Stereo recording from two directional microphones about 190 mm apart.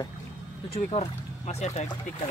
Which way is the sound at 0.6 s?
35° left (ahead or behind).